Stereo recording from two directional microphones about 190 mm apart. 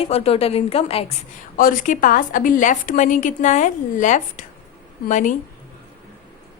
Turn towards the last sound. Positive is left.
turn(degrees=40)  # may be behind; listen again after turning